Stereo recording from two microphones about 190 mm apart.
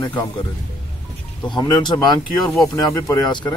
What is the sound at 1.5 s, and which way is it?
Speech, 25° left (ahead or behind).